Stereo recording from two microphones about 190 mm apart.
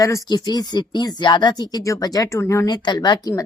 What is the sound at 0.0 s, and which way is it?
Speech, 15° left (ahead or behind).